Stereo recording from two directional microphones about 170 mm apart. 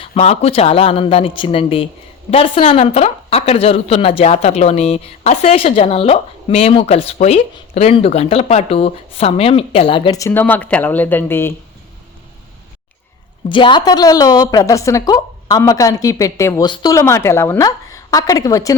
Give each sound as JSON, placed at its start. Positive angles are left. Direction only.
{"t": 0.0, "sound": "a woman's voice", "side_deg": 40}
{"t": 10.2, "sound": "speech", "side_deg": 15}
{"t": 13.5, "sound": "a woman's voice", "side_deg": 30}